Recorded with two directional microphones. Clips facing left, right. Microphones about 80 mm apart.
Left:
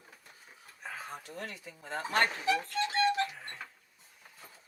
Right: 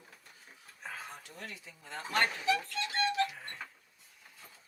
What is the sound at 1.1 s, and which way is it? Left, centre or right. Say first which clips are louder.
Speech: left 5 dB; left.